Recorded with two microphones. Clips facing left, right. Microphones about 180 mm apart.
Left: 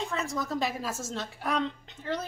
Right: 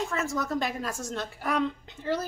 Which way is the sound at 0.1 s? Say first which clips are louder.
Right 2 dB; centre (ahead or behind).